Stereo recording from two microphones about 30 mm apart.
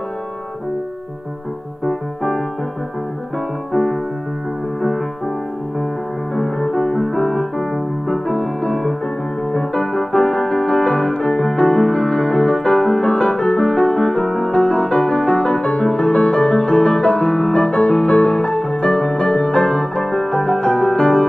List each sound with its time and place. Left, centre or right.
1.9 s keyboard: centre
3.7 s music: centre
6.3 s music: centre
9.8 s keyboard: left
11.5 s music: left